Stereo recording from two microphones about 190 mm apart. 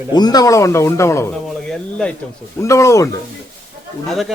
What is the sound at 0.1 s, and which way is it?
A man's voice, 20° left (ahead or behind).